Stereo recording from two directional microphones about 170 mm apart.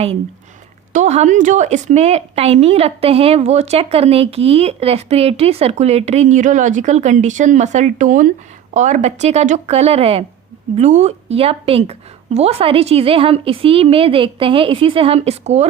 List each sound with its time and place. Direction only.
0.9 s a woman's voice: 45° right (ahead or behind)